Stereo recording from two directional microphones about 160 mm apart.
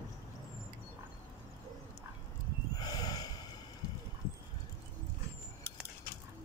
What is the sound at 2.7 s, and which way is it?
Snort, 25° left (ahead or behind).